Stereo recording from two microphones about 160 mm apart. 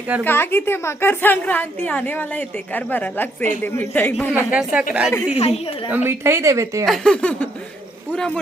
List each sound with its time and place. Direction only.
0.3 s a woman's voice: 15° left (ahead or behind)
4.4 s a woman's voice: 5° right (ahead or behind)
5.3 s a woman's voice: 40° left (ahead or behind)
5.9 s a woman's voice: 15° right (ahead or behind)
6.8 s speech: 5° left (ahead or behind)